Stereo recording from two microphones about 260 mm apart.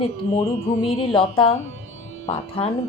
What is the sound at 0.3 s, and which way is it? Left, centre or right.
Music, left.